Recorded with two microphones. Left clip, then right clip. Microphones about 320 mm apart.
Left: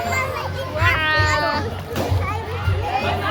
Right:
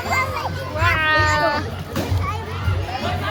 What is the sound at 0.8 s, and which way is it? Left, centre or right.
Cat, centre.